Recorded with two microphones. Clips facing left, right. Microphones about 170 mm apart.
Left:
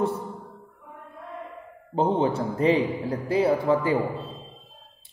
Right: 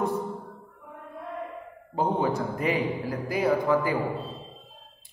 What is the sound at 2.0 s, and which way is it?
A man's voice, 30° left (ahead or behind).